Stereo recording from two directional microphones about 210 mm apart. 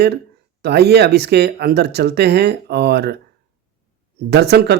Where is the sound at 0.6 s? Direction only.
50° right (ahead or behind).